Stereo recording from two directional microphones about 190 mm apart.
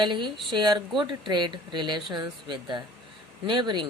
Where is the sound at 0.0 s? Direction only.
25° right (ahead or behind).